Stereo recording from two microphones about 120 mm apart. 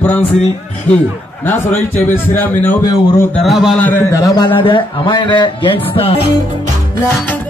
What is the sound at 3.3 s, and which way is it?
Speech, centre (ahead or behind).